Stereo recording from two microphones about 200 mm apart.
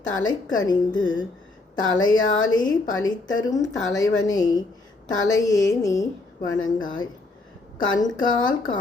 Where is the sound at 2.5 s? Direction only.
20° left (ahead or behind).